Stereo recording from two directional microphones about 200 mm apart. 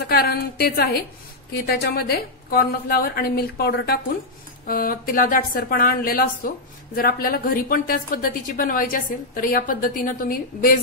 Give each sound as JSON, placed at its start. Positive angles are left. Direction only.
{"t": 0.1, "sound": "a woman's voice", "side_deg": 50}